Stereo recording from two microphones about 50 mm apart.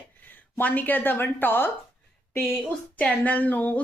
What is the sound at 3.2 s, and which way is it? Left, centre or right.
Speech, left.